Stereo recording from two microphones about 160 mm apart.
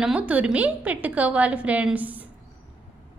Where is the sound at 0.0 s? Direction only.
5° right (ahead or behind).